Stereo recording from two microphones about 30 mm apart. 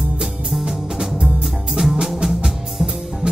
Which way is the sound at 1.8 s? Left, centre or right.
Right.